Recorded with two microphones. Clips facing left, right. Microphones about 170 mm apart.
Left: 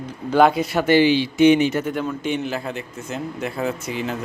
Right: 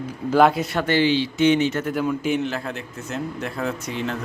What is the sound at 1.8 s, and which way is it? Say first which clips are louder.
A man's voice: right 1 dB; 5° right (ahead or behind).